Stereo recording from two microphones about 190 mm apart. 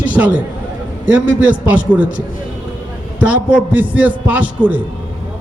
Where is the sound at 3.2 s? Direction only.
5° right (ahead or behind).